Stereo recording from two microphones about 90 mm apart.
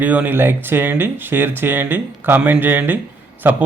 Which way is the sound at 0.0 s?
20° right (ahead or behind).